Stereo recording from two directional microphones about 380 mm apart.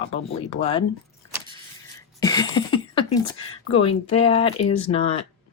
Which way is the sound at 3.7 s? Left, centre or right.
Centre.